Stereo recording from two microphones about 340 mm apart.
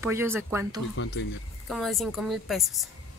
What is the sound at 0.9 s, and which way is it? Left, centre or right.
Speech, left.